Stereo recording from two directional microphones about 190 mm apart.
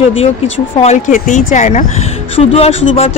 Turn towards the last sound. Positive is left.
turn(degrees=30)  # may be behind; listen again after turning